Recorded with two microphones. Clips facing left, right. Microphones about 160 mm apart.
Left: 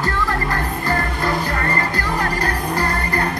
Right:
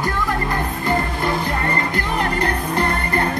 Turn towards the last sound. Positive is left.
turn(degrees=-25)  # may be behind; listen again after turning